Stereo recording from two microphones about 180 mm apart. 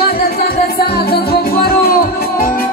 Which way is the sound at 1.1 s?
55° left (ahead or behind).